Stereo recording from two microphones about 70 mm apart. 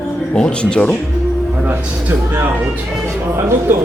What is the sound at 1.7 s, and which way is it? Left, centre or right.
A man's voice, right.